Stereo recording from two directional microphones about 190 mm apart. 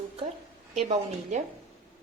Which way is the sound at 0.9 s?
35° right (ahead or behind).